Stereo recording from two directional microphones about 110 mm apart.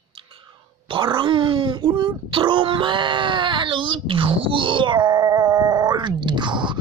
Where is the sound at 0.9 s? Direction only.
50° right (ahead or behind).